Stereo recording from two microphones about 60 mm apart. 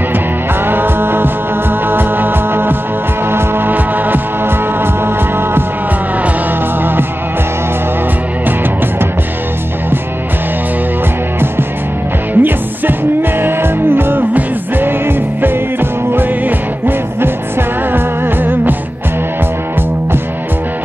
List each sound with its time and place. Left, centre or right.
0.7 s music: right
12.4 s music: right